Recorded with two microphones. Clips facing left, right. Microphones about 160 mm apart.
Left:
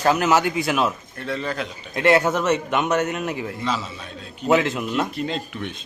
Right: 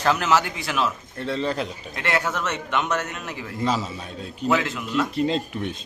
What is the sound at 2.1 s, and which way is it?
A man's voice, 20° left (ahead or behind).